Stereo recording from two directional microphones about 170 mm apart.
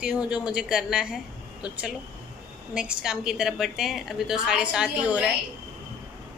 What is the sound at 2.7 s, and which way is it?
A woman's voice, 5° right (ahead or behind).